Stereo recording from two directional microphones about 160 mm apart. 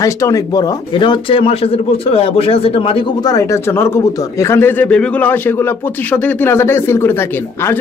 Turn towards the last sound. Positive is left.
turn(degrees=15)  # may be behind; listen again after turning